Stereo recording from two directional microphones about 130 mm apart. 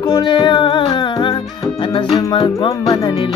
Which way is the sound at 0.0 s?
35° left (ahead or behind).